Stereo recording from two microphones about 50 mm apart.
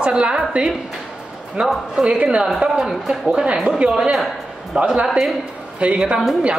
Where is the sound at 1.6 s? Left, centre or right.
Right.